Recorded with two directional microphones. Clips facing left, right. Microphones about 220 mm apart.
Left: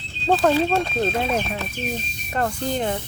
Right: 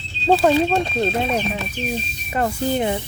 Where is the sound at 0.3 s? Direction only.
10° right (ahead or behind).